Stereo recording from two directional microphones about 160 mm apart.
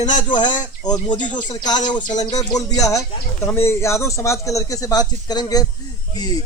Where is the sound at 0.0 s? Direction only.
50° left (ahead or behind).